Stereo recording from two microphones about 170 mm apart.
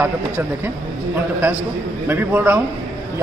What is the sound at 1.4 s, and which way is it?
A man's voice, 10° right (ahead or behind).